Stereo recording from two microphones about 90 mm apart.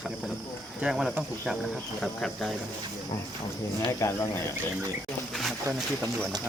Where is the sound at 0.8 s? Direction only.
5° right (ahead or behind).